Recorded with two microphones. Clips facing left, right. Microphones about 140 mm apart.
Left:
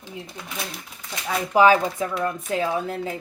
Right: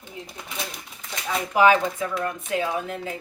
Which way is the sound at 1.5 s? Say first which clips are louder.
Left 2 dB; 35° left (ahead or behind).